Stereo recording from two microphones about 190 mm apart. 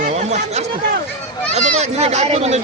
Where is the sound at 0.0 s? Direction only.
35° right (ahead or behind).